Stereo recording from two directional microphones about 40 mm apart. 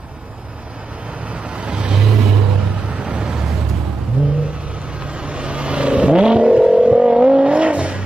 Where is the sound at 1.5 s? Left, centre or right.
Right.